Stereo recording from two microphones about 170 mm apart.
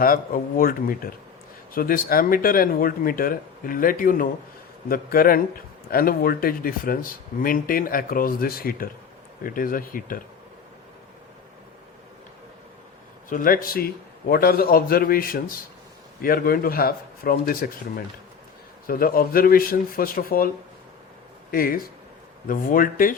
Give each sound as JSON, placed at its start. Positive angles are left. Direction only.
{"t": 0.0, "sound": "speech", "side_deg": 55}
{"t": 13.3, "sound": "speech", "side_deg": 55}
{"t": 21.5, "sound": "speech", "side_deg": 60}